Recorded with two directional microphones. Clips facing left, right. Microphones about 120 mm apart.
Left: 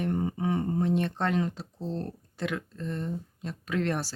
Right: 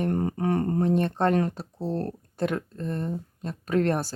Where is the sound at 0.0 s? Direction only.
55° right (ahead or behind).